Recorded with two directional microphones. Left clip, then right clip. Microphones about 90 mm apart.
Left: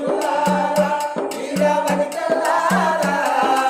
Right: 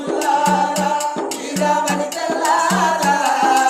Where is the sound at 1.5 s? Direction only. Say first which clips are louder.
Even; 40° left (ahead or behind).